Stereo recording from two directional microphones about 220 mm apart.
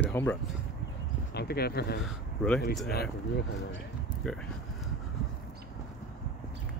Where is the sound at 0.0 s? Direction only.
10° left (ahead or behind).